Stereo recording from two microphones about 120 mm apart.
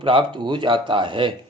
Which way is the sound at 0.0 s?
45° right (ahead or behind).